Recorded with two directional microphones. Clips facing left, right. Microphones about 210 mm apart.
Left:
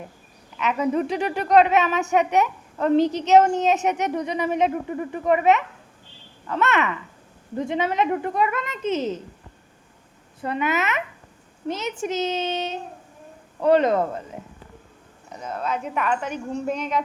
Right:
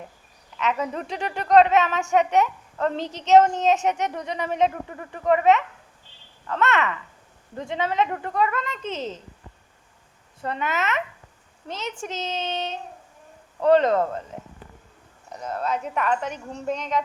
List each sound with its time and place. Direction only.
0.6 s speech: 10° left (ahead or behind)
10.4 s speech: 10° left (ahead or behind)
15.4 s speech: 5° left (ahead or behind)